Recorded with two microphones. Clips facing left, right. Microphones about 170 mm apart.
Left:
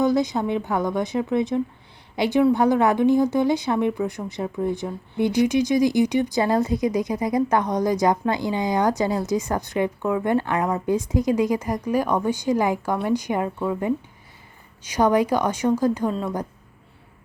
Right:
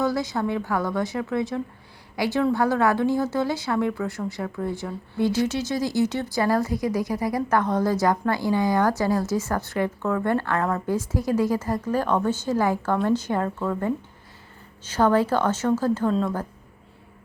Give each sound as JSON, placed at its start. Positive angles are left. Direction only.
{"t": 0.0, "sound": "a woman's voice", "side_deg": 20}